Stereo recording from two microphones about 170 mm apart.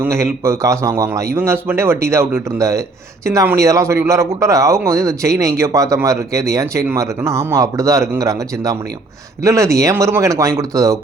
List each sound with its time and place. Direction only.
0.0 s a man's voice: 15° right (ahead or behind)